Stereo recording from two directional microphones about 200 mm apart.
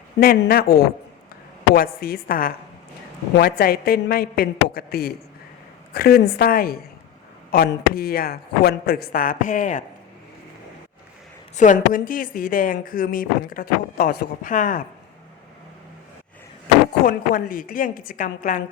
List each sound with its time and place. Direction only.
0.2 s a woman's voice: 50° left (ahead or behind)
11.5 s a woman's voice: 40° left (ahead or behind)
17.1 s a woman's voice: 45° left (ahead or behind)